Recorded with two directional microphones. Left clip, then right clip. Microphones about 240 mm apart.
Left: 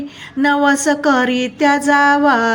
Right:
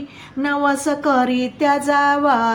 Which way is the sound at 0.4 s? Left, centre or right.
Left.